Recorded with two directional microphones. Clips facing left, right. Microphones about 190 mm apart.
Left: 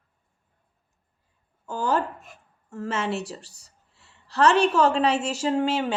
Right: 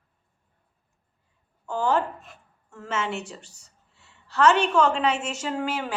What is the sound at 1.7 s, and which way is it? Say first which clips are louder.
A woman's voice: right 1 dB; 40° left (ahead or behind).